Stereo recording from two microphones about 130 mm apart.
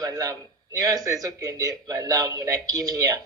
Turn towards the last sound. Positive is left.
turn(degrees=-25)  # may be behind; listen again after turning